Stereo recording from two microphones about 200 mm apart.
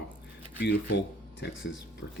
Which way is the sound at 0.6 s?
60° left (ahead or behind).